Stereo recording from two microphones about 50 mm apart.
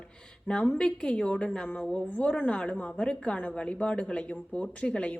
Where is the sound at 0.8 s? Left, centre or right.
Centre.